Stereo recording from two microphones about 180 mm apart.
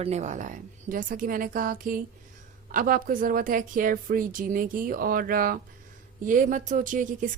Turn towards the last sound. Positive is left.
turn(degrees=-45)  # may be behind; listen again after turning